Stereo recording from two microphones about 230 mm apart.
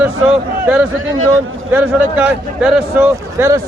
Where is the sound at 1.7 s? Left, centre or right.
Centre.